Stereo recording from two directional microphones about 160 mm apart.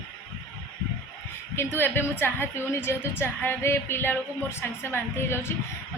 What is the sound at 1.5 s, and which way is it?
A woman's voice, 15° left (ahead or behind).